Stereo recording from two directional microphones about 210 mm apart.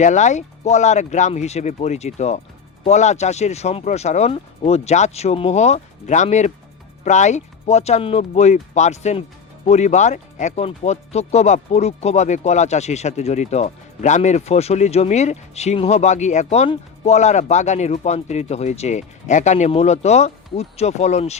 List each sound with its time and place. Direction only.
0.0 s speech: 35° left (ahead or behind)